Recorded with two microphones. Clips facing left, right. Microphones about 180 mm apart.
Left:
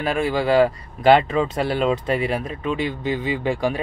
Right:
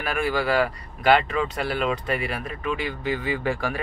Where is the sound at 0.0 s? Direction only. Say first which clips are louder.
Left 4 dB; 25° left (ahead or behind).